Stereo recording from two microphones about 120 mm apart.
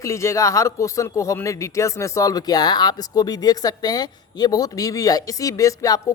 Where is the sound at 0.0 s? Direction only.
25° left (ahead or behind).